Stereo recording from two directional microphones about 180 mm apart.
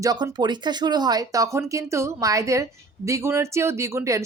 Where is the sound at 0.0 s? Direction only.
20° right (ahead or behind).